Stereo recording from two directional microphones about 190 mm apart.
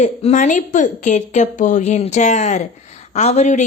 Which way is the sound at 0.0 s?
40° left (ahead or behind).